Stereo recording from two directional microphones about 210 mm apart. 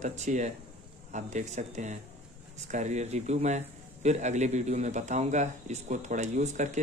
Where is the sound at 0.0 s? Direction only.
35° right (ahead or behind).